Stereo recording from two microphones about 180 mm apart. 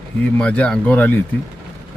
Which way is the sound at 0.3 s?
5° left (ahead or behind).